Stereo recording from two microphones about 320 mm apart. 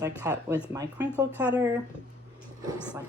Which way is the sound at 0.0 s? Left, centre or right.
Centre.